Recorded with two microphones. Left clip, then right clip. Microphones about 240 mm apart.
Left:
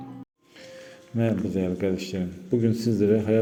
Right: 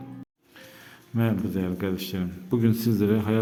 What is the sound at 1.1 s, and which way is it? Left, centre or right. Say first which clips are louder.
A man's voice: left 2 dB; centre.